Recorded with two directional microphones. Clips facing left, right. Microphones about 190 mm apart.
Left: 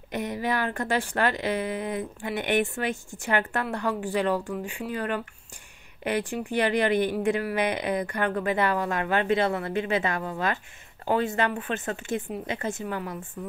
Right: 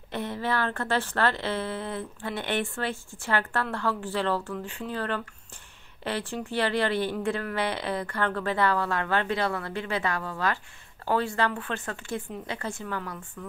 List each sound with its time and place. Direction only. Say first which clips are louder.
0.1 s a woman's voice: left 1 dB; 15° left (ahead or behind)